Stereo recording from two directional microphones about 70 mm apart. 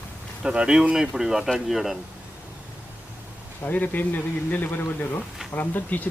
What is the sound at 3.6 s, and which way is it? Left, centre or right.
Speech, left.